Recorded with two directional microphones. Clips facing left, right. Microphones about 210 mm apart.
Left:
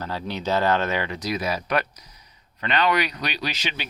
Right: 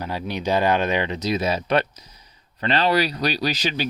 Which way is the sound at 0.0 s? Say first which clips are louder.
Right 2 dB; 15° right (ahead or behind).